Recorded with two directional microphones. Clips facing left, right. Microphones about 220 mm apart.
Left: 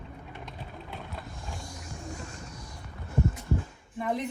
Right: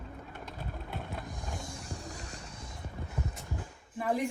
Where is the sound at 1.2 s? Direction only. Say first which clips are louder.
Right 1 dB; 20° right (ahead or behind).